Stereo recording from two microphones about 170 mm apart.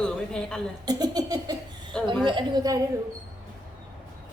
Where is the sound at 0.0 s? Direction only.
5° left (ahead or behind).